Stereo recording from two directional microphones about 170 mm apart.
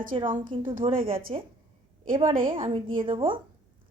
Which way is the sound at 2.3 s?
55° right (ahead or behind).